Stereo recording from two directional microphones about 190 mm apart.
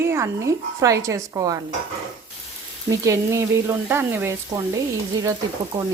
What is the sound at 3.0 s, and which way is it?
A woman's voice, 15° right (ahead or behind).